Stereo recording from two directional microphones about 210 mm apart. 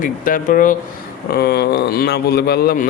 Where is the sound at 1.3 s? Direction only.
50° left (ahead or behind).